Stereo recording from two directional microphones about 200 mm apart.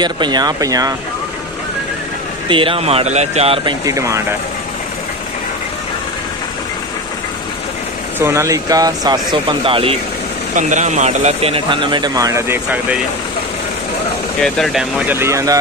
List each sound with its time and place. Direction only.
0.0 s speech: 20° right (ahead or behind)
2.4 s speech: 25° right (ahead or behind)
3.8 s speech: 15° right (ahead or behind)
8.2 s speech: 15° right (ahead or behind)
10.5 s speech: 35° right (ahead or behind); by 12.5 s 15° right (ahead or behind)
14.4 s speech: centre (ahead or behind); by 15.6 s 15° right (ahead or behind)